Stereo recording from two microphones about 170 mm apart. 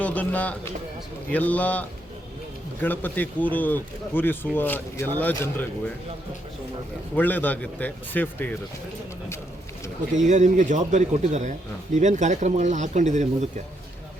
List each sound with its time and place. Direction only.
0.0 s speech: 10° left (ahead or behind)
7.2 s speech: 10° left (ahead or behind)
10.2 s speech: 45° right (ahead or behind)